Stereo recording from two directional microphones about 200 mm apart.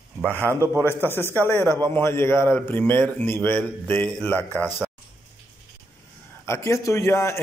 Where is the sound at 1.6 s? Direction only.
15° right (ahead or behind).